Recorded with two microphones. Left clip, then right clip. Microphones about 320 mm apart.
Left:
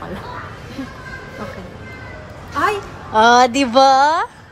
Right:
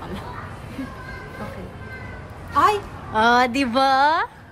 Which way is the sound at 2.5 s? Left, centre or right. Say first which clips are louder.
Right 1 dB; centre.